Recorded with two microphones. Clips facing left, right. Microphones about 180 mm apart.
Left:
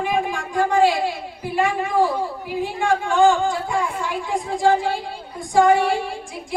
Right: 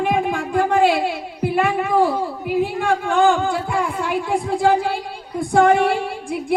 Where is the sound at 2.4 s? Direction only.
60° right (ahead or behind).